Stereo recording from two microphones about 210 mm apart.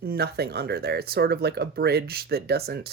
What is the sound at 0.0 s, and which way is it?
Speech, 50° right (ahead or behind).